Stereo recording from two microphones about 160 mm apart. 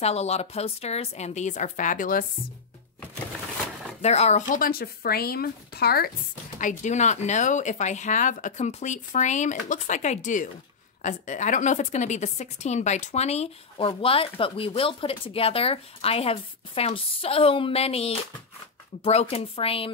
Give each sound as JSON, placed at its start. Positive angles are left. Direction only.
{"t": 0.0, "sound": "speech", "side_deg": 40}
{"t": 4.0, "sound": "speech", "side_deg": 45}
{"t": 6.6, "sound": "speech", "side_deg": 50}